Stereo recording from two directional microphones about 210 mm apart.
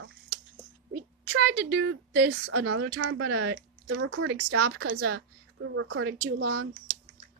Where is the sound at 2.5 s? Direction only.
75° right (ahead or behind); by 7.0 s 60° right (ahead or behind).